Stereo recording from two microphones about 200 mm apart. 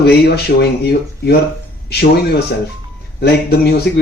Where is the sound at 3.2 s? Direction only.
55° left (ahead or behind).